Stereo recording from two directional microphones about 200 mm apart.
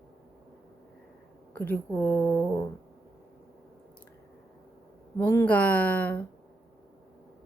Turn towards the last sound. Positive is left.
turn(degrees=10)  # may be behind; listen again after turning